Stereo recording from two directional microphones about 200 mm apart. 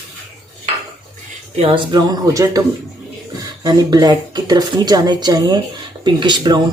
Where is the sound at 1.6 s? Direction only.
25° right (ahead or behind).